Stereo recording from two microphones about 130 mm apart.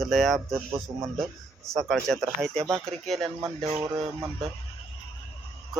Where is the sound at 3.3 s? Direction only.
30° right (ahead or behind).